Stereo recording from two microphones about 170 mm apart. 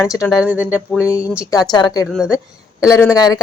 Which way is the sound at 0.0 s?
15° left (ahead or behind).